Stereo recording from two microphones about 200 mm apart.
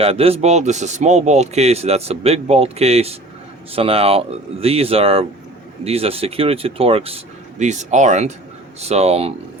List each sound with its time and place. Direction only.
0.0 s a man's voice: 30° right (ahead or behind)